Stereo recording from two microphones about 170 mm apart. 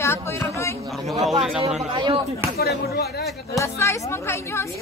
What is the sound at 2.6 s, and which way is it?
Speech, 70° left (ahead or behind).